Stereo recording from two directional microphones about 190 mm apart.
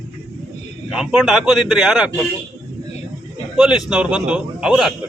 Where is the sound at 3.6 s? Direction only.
5° right (ahead or behind).